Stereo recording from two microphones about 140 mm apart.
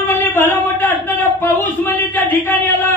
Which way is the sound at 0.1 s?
15° left (ahead or behind).